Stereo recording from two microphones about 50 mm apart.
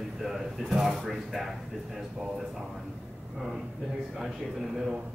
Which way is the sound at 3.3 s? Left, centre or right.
Centre.